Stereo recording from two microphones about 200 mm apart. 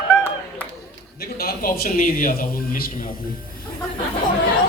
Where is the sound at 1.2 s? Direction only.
50° left (ahead or behind).